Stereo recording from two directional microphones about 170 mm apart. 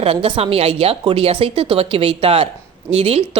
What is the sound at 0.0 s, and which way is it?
Speech, 35° right (ahead or behind).